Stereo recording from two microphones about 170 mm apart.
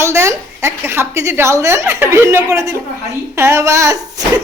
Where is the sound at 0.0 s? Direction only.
15° right (ahead or behind).